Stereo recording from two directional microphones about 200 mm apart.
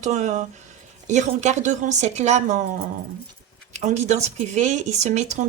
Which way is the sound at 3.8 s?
35° right (ahead or behind).